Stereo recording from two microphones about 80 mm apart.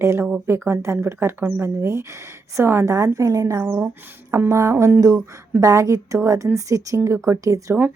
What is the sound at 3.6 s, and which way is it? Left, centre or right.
Speech, right.